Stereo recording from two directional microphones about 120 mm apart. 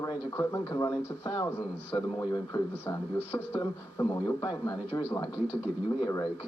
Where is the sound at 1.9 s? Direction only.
35° left (ahead or behind).